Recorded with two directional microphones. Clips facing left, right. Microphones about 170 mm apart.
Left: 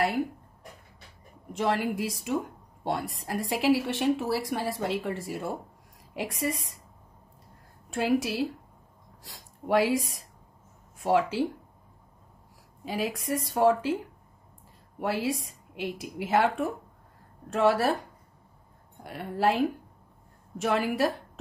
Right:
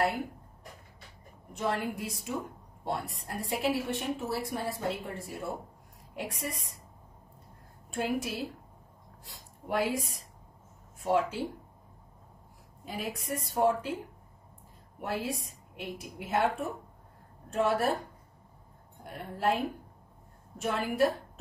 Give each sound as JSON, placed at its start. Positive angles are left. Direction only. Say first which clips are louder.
{"t": 1.5, "sound": "a woman's voice", "louder": "left 5 dB", "side_deg": 90}
{"t": 7.9, "sound": "a woman's voice", "louder": "left 6 dB", "side_deg": 85}
{"t": 12.8, "sound": "a woman's voice", "louder": "left 6 dB", "side_deg": 90}
{"t": 15.0, "sound": "a woman's voice", "louder": "left 5 dB", "side_deg": 90}
{"t": 19.0, "sound": "a woman's voice", "louder": "left 4 dB", "side_deg": 90}